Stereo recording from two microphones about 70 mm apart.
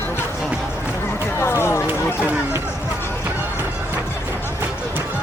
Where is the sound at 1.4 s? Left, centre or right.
Left.